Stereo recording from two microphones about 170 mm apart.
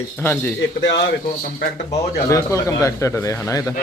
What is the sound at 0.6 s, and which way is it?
Speech, 90° left.